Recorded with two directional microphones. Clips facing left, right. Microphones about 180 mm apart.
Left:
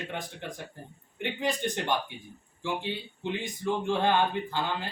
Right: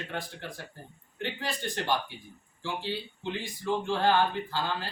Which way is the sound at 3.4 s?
20° left (ahead or behind).